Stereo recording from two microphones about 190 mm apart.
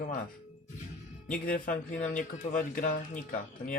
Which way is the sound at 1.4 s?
45° left (ahead or behind).